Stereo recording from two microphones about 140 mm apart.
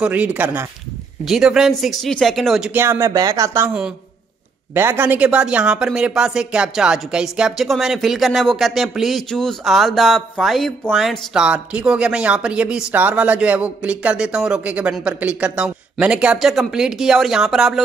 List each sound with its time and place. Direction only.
0.0 s speech: 10° right (ahead or behind)
1.2 s speech: centre (ahead or behind)
2.7 s speech: 15° right (ahead or behind)
4.7 s speech: 15° right (ahead or behind)